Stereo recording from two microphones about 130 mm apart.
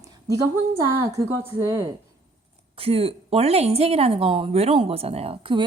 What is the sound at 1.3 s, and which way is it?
Speech, 25° right (ahead or behind).